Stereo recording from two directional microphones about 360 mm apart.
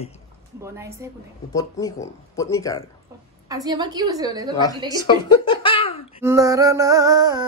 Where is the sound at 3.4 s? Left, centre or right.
Centre.